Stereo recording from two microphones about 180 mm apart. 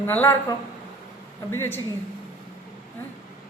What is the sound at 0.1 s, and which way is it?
Speech, 10° left (ahead or behind).